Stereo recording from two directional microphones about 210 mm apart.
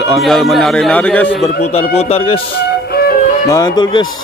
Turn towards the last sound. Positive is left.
turn(degrees=20)  # may be behind; listen again after turning